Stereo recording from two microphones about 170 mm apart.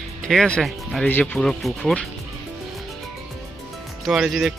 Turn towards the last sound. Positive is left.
turn(degrees=0)  # may be behind; listen again after turning